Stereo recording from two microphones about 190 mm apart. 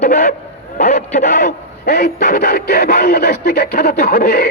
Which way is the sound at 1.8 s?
55° left (ahead or behind).